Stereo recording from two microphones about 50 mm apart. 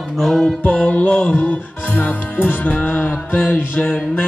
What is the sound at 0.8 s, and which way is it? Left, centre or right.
Music, left.